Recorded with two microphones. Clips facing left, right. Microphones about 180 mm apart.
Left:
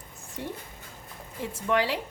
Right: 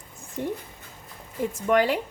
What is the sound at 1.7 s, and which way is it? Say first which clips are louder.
Speech: right 4 dB; 50° right (ahead or behind).